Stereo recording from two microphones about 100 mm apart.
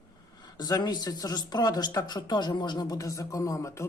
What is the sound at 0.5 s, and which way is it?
A man's voice, 40° left (ahead or behind).